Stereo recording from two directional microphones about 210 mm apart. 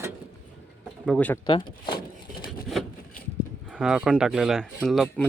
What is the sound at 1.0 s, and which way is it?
Speech, 5° left (ahead or behind).